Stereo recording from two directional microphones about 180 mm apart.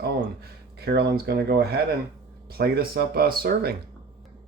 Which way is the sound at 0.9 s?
60° right (ahead or behind).